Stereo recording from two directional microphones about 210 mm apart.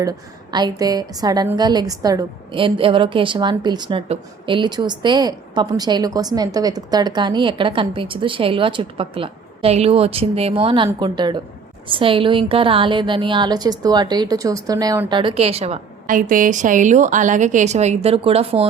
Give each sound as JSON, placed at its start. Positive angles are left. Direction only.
{"t": 0.5, "sound": "a woman's voice", "side_deg": -20}